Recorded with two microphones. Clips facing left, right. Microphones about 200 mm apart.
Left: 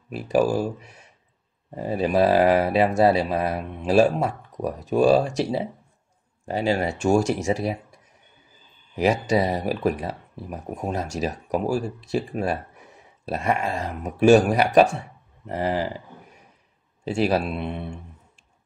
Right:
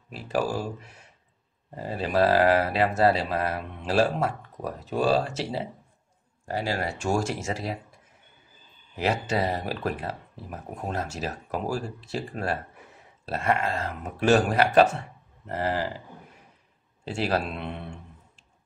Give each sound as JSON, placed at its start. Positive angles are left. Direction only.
{"t": 0.1, "sound": "speech", "side_deg": 15}
{"t": 8.9, "sound": "speech", "side_deg": 15}
{"t": 17.0, "sound": "speech", "side_deg": 15}